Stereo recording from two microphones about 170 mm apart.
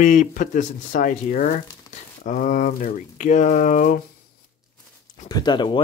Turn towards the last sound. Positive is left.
turn(degrees=25)  # may be behind; listen again after turning